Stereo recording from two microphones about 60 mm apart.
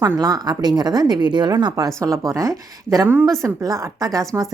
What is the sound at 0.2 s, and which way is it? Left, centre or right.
Speech, right.